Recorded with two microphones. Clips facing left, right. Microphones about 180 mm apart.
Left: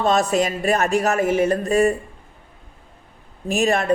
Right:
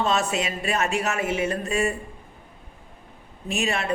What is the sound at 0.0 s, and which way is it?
Speech, 40° left (ahead or behind).